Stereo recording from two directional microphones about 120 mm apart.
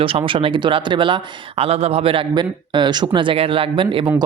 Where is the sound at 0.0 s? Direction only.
45° right (ahead or behind).